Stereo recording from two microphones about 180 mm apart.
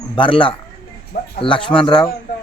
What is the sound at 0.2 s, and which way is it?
A man's voice, 30° left (ahead or behind).